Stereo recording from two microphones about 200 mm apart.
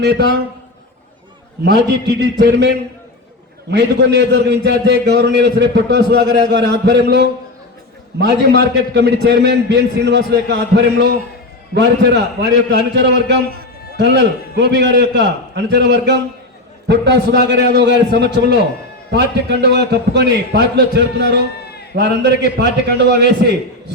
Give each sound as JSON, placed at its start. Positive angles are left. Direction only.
{"t": 0.0, "sound": "a man's voice", "side_deg": -55}
{"t": 1.6, "sound": "a man's voice", "side_deg": -55}
{"t": 21.5, "sound": "bleat", "side_deg": 55}
{"t": 21.9, "sound": "a man's voice", "side_deg": -60}